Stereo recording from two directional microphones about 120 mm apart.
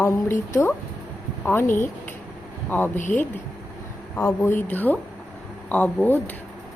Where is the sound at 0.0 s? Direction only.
20° left (ahead or behind).